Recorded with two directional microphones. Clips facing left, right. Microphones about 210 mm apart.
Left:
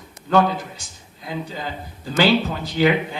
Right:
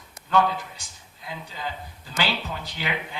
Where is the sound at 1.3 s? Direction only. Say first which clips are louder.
Left 6 dB; 40° left (ahead or behind).